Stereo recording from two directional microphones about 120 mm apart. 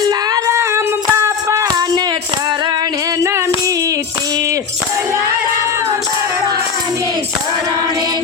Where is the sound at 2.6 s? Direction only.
35° right (ahead or behind).